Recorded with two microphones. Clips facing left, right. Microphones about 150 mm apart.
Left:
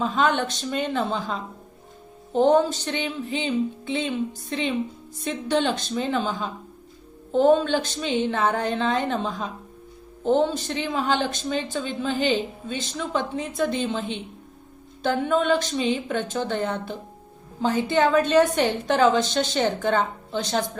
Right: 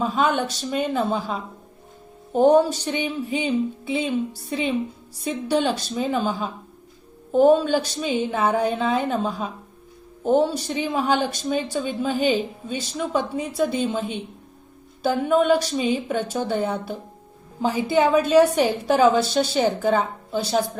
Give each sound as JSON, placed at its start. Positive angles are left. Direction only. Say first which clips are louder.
{"t": 0.0, "sound": "speech", "louder": "right 1 dB", "side_deg": -10}